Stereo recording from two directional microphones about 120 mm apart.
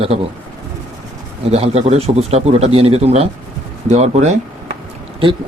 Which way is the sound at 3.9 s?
70° right (ahead or behind).